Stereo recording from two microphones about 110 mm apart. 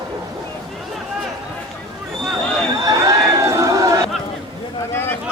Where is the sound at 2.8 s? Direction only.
30° right (ahead or behind).